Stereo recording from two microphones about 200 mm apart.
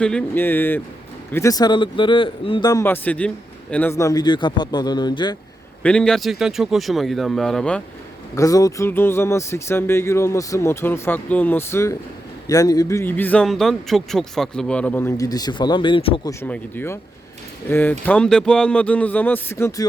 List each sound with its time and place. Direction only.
0.0 s a man's voice: 5° left (ahead or behind); by 5.4 s 20° left (ahead or behind)
5.8 s speech: 5° left (ahead or behind)
8.4 s a man's voice: 15° left (ahead or behind)
16.4 s a man's voice: 10° left (ahead or behind)